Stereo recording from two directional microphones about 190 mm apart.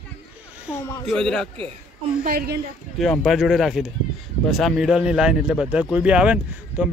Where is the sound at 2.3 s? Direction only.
50° right (ahead or behind).